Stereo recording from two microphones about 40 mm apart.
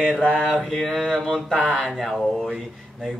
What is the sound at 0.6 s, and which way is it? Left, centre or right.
Mantra, centre.